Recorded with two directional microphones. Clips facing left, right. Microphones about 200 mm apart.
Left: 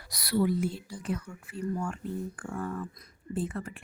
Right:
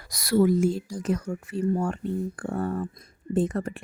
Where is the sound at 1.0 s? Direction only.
45° right (ahead or behind).